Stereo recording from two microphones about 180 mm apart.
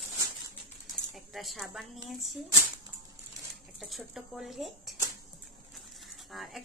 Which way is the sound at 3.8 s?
Centre (ahead or behind).